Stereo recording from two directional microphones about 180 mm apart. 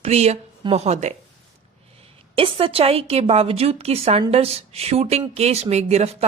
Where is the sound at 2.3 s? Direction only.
30° right (ahead or behind).